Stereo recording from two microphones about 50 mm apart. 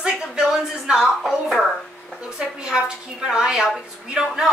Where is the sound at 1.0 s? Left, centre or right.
Centre.